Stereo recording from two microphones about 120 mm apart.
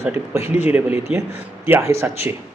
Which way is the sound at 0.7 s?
15° right (ahead or behind).